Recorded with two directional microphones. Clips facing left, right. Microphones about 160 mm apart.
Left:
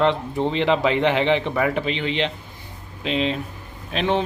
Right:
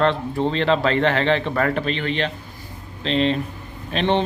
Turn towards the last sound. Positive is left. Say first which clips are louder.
# right 2 dB
turn(degrees=5)  # may be behind; listen again after turning